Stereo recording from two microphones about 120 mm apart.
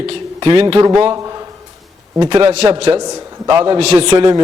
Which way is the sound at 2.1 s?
40° right (ahead or behind).